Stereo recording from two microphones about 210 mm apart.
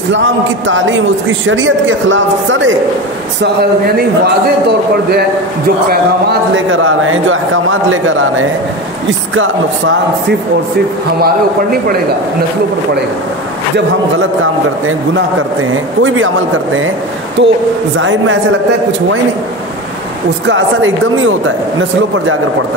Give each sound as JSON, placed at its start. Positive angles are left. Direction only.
{"t": 0.7, "sound": "speech", "side_deg": -65}
{"t": 6.5, "sound": "a man's voice", "side_deg": -70}
{"t": 13.7, "sound": "speech", "side_deg": -65}
{"t": 15.7, "sound": "a man's voice", "side_deg": -70}
{"t": 17.4, "sound": "a man's voice", "side_deg": -60}
{"t": 20.4, "sound": "a man's voice", "side_deg": -65}